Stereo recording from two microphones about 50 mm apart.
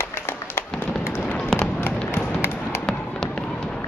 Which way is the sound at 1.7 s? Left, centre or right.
Left.